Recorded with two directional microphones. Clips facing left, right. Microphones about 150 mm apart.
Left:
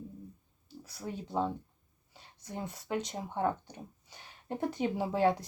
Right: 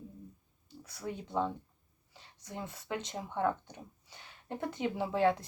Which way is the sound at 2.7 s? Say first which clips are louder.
Left 4 dB; 15° left (ahead or behind).